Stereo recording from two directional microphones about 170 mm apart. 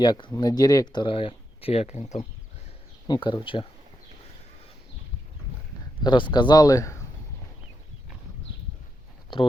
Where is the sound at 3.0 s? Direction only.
25° left (ahead or behind).